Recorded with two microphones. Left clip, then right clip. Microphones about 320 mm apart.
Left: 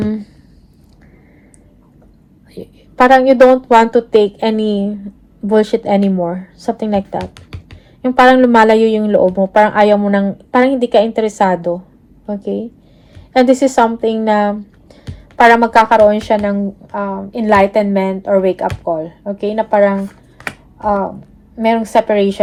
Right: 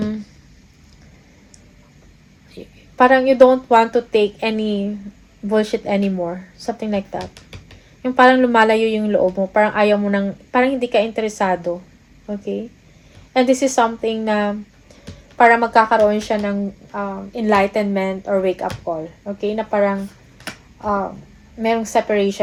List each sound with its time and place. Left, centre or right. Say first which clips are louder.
2.6 s a woman's voice: left 3 dB; left
21.6 s speech: left 5 dB; left